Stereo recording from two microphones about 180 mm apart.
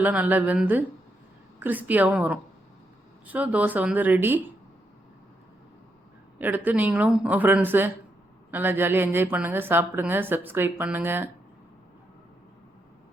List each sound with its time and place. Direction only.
0.0 s a woman's voice: 10° right (ahead or behind)
6.4 s a woman's voice: 10° right (ahead or behind)